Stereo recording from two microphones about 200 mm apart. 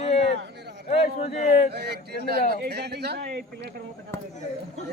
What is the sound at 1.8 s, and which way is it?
Speech, 55° right (ahead or behind).